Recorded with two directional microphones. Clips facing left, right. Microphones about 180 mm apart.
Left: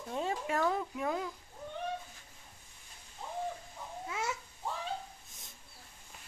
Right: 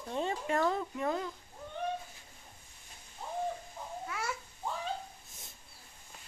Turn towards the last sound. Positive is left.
turn(degrees=20)  # may be behind; listen again after turning